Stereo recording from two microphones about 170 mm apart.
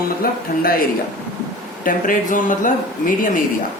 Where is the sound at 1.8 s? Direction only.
50° left (ahead or behind).